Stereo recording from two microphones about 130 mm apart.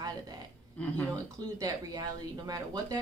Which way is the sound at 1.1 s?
25° right (ahead or behind).